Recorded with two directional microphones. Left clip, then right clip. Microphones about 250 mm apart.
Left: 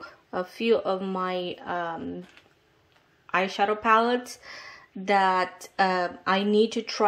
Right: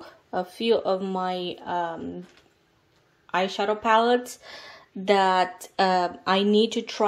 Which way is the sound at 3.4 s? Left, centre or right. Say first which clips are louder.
Even; centre.